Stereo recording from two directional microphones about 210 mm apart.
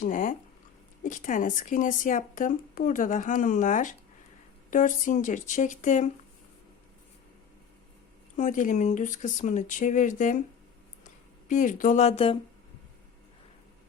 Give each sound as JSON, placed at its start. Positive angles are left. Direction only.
{"t": 0.0, "sound": "speech", "side_deg": 40}
{"t": 8.4, "sound": "speech", "side_deg": 35}